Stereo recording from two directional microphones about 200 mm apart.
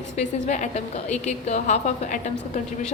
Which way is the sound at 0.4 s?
40° left (ahead or behind).